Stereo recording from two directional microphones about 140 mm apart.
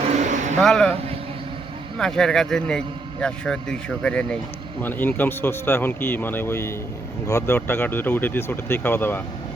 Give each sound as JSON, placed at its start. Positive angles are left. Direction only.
{"t": 0.1, "sound": "vehicle", "side_deg": -60}
{"t": 0.6, "sound": "a man's voice", "side_deg": 5}
{"t": 2.0, "sound": "a man's voice", "side_deg": 5}